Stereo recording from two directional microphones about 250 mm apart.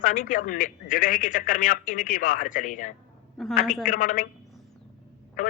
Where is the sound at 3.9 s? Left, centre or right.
Left.